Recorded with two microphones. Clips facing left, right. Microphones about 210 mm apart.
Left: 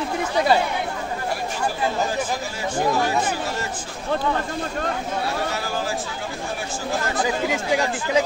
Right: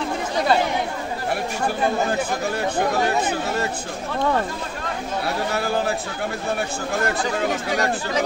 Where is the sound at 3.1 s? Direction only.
60° right (ahead or behind).